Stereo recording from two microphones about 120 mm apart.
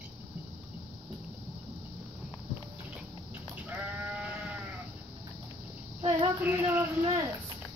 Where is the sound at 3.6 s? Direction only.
15° right (ahead or behind).